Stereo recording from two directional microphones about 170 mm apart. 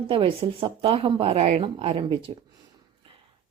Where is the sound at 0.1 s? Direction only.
30° right (ahead or behind).